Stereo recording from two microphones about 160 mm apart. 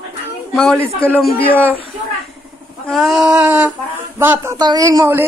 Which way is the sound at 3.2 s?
20° right (ahead or behind).